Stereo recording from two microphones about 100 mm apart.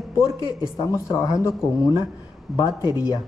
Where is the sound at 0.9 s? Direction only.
30° left (ahead or behind).